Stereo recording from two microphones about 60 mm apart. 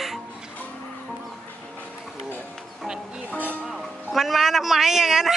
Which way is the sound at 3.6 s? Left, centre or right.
Centre.